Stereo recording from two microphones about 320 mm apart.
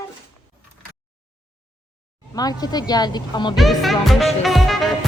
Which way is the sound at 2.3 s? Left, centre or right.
Centre.